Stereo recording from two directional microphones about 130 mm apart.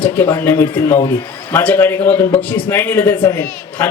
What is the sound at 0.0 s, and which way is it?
A man's voice, 20° left (ahead or behind).